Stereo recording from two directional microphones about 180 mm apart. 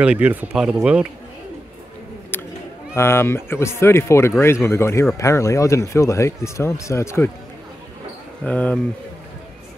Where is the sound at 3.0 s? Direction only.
15° left (ahead or behind).